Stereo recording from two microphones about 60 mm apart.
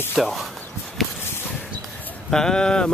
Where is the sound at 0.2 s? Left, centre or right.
Centre.